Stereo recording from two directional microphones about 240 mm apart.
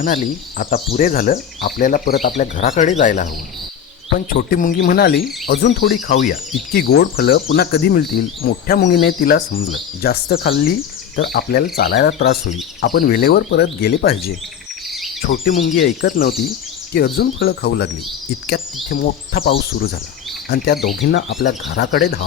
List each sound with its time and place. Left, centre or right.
0.9 s speech: left
4.3 s speech: left
14.8 s bird vocalization: centre
15.2 s speech: left